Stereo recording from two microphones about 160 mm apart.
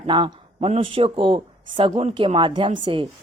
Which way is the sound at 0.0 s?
30° right (ahead or behind).